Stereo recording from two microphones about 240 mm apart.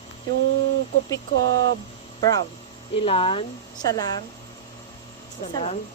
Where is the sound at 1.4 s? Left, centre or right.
Right.